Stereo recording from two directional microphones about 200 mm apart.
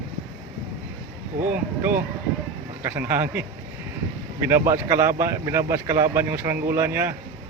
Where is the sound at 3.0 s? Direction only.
10° right (ahead or behind).